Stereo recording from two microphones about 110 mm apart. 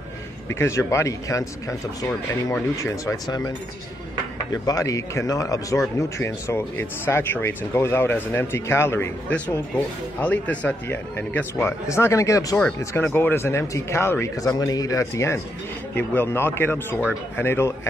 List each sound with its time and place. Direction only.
0.5 s speech: 25° left (ahead or behind)
4.6 s speech: 30° left (ahead or behind)
10.2 s speech: 15° left (ahead or behind); by 12.5 s 30° left (ahead or behind)
12.5 s speech: 15° left (ahead or behind)
15.9 s speech: 15° left (ahead or behind)